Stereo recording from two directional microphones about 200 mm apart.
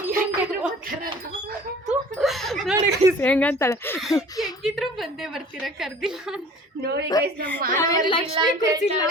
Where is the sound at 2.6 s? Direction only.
5° right (ahead or behind).